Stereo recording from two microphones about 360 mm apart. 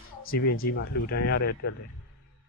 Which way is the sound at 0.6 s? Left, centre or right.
Left.